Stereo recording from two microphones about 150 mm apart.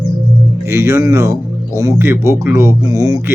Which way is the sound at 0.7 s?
15° right (ahead or behind).